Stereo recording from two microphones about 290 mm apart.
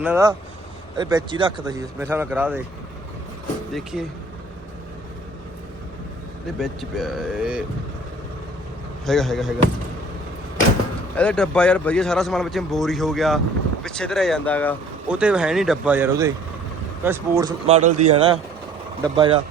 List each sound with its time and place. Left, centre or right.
0.0 s speech: centre
3.7 s a man's voice: centre
6.6 s a man's voice: centre
9.0 s a man's voice: centre
11.2 s a man's voice: centre
17.7 s a man's voice: right